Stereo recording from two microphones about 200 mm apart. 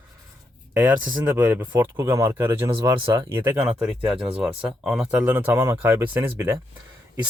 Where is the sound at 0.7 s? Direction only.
10° right (ahead or behind).